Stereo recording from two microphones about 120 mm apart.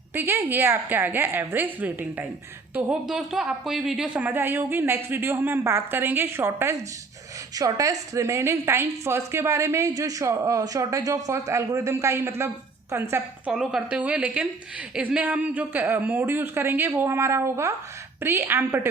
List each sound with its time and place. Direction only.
0.1 s a woman's voice: 20° right (ahead or behind)
13.5 s a woman's voice: 5° right (ahead or behind); by 18.9 s 20° right (ahead or behind)